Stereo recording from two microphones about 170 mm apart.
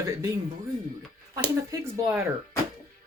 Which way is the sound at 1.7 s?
20° right (ahead or behind).